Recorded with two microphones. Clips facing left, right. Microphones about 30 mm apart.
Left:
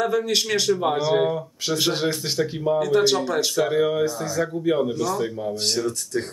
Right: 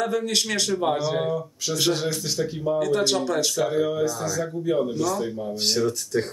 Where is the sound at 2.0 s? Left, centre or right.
Left.